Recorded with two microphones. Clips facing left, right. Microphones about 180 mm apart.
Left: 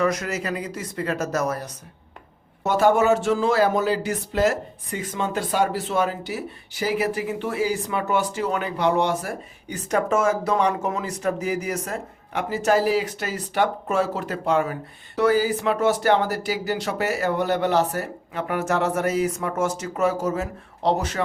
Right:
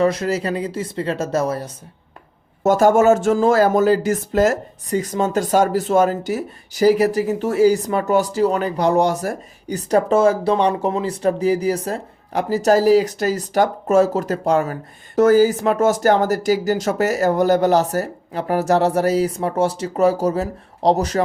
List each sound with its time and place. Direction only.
0.0 s speech: 30° right (ahead or behind)
2.6 s speech: 45° right (ahead or behind)